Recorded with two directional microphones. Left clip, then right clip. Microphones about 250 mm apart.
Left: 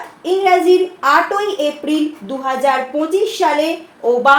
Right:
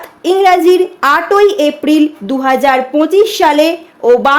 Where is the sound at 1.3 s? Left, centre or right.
Right.